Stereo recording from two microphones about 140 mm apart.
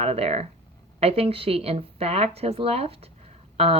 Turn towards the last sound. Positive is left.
turn(degrees=-45)  # may be behind; listen again after turning